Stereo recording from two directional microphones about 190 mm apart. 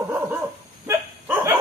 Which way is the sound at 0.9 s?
15° right (ahead or behind).